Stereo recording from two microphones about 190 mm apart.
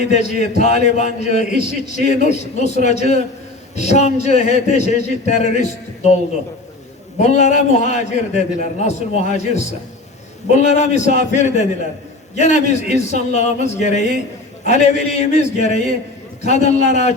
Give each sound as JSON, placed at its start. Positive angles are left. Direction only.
{"t": 0.0, "sound": "a man's voice", "side_deg": 35}
{"t": 7.2, "sound": "a man's voice", "side_deg": 40}